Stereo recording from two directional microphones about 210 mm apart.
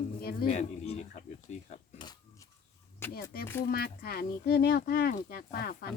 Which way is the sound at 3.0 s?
10° left (ahead or behind).